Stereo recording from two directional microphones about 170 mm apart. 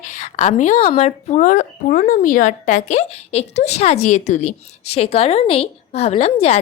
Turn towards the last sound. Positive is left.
turn(degrees=35)  # may be behind; listen again after turning